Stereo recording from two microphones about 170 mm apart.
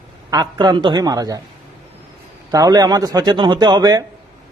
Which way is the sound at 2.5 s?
20° right (ahead or behind).